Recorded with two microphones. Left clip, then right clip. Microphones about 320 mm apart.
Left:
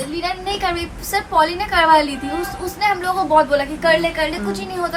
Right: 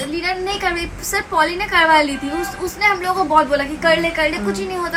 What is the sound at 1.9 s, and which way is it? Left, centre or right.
Speech, centre.